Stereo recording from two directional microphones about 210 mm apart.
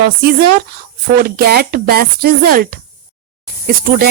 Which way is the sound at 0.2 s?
45° right (ahead or behind).